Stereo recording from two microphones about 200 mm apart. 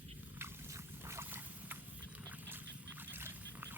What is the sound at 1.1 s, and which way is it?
Boat, 10° right (ahead or behind).